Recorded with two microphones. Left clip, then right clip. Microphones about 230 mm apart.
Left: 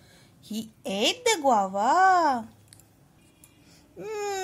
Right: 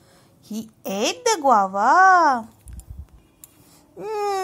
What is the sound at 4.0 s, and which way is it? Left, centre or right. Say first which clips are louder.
Speech: right 7 dB; centre.